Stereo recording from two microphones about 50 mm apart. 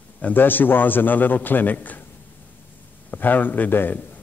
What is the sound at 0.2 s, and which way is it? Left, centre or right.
A man's voice, left.